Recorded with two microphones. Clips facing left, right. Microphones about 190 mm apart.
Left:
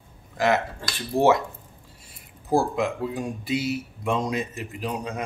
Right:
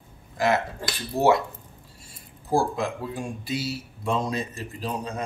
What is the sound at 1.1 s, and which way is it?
Speech, 10° left (ahead or behind).